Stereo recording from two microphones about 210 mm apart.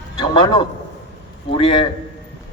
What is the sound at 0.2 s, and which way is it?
A man's voice, 20° left (ahead or behind).